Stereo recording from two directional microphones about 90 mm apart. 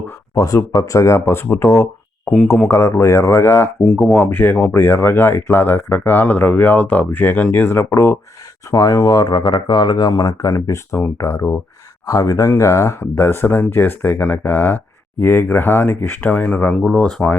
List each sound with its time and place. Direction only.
0.3 s speech: 40° left (ahead or behind)
8.7 s speech: 40° left (ahead or behind)
9.4 s speech: 60° left (ahead or behind); by 10.8 s 35° left (ahead or behind)
10.9 s speech: 25° left (ahead or behind)
12.0 s speech: 40° left (ahead or behind); by 17.3 s 10° left (ahead or behind)